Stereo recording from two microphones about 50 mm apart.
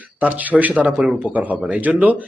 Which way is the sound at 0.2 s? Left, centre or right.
Right.